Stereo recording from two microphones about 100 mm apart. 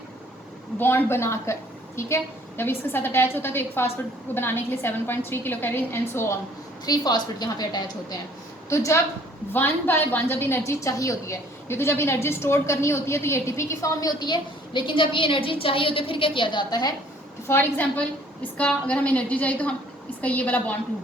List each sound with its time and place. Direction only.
0.8 s a woman's voice: 20° left (ahead or behind)
6.8 s a woman's voice: 40° left (ahead or behind)
8.7 s a woman's voice: 30° left (ahead or behind)
10.6 s a woman's voice: 30° left (ahead or behind)
17.5 s a woman's voice: 20° left (ahead or behind)